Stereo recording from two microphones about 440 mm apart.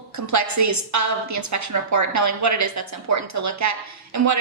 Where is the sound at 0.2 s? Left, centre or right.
Right.